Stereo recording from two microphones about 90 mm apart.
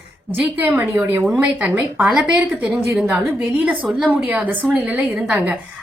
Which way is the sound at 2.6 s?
30° right (ahead or behind).